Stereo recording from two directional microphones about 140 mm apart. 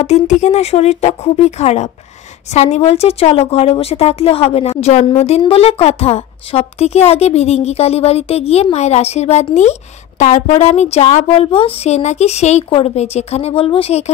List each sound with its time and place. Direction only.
0.0 s a woman's voice: 55° left (ahead or behind)